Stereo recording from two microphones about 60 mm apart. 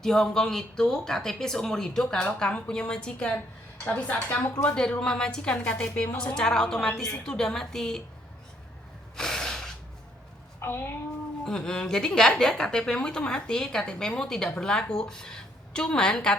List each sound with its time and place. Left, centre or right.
0.0 s a woman's voice: centre; by 4.7 s left
4.7 s a woman's voice: centre
6.3 s a woman's voice: centre
9.1 s snort: centre
10.6 s speech: left
11.4 s a woman's voice: centre